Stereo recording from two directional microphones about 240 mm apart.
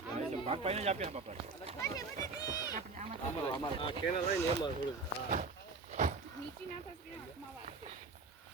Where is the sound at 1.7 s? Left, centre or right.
Centre.